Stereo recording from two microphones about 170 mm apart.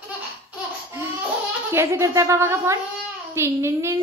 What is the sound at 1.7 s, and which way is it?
A woman's voice, 15° right (ahead or behind).